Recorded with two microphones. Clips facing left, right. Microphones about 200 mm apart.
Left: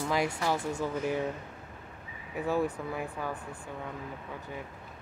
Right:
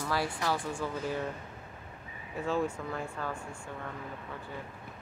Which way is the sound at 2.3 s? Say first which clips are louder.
Left 2 dB; 15° left (ahead or behind).